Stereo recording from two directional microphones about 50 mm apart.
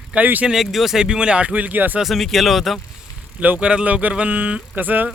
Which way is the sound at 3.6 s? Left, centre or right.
Right.